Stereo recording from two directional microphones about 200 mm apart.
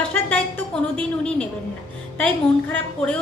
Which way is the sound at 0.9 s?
5° left (ahead or behind).